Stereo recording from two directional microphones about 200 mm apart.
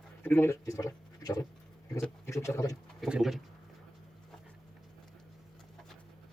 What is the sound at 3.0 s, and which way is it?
Bird, centre (ahead or behind).